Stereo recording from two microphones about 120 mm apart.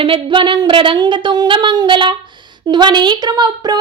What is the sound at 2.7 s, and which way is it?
Speech, 40° right (ahead or behind).